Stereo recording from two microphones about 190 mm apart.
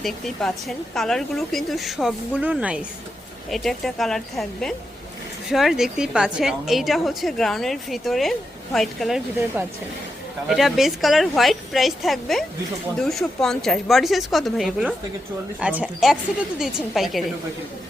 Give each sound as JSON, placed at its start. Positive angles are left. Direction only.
{"t": 0.0, "sound": "a woman's voice", "side_deg": 0}